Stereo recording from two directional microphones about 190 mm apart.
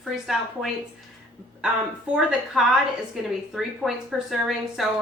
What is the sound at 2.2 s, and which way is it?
A woman's voice, 5° right (ahead or behind).